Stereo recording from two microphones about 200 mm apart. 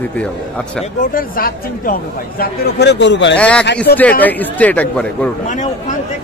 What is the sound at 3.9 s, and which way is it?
Speech, 55° left (ahead or behind).